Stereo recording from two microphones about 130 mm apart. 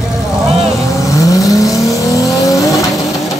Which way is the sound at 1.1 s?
25° left (ahead or behind).